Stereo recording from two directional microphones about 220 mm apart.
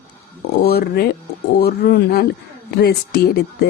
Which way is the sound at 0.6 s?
45° left (ahead or behind).